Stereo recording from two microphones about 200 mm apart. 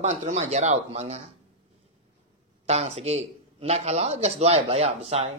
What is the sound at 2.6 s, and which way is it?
Speech, 35° right (ahead or behind).